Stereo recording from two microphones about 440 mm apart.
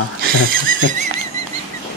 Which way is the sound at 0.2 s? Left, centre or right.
Centre.